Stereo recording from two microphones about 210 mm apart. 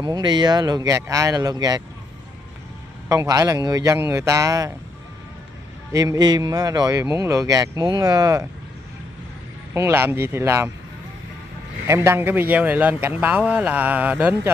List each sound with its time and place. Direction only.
0.0 s a man's voice: 20° right (ahead or behind)
3.1 s a man's voice: 15° right (ahead or behind)
5.9 s a man's voice: 15° right (ahead or behind)
9.8 s a man's voice: 10° right (ahead or behind)
11.9 s a man's voice: 10° right (ahead or behind)